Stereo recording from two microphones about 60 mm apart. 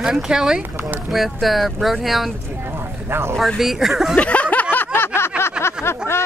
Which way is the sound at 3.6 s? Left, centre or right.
Centre.